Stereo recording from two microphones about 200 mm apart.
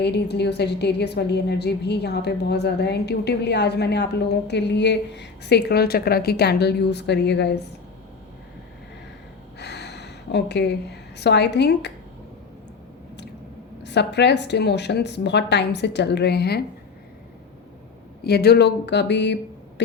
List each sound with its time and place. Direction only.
0.0 s a woman's voice: 55° left (ahead or behind)
9.6 s a sound: 55° left (ahead or behind)
11.2 s a woman's voice: 55° left (ahead or behind)
13.8 s a woman's voice: 60° left (ahead or behind)
18.2 s a woman's voice: 55° left (ahead or behind)